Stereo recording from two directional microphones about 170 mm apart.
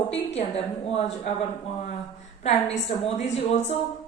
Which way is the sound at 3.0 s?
40° left (ahead or behind).